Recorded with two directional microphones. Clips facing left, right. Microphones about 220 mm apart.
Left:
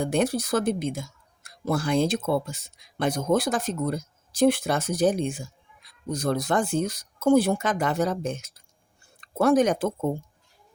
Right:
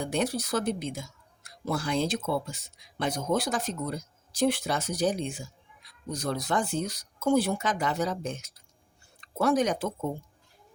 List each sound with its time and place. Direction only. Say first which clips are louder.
0.0 s speech: left 5 dB; 50° left (ahead or behind)